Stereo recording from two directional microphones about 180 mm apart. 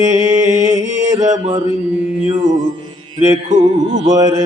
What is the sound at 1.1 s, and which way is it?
Mantra, 20° right (ahead or behind).